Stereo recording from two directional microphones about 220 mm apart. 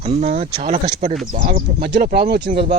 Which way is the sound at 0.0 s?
30° right (ahead or behind).